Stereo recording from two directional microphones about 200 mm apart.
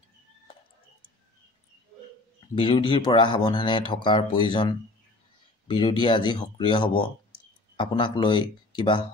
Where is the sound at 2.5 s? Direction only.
25° left (ahead or behind).